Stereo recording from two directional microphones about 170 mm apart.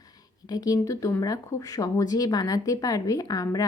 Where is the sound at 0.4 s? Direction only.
20° left (ahead or behind).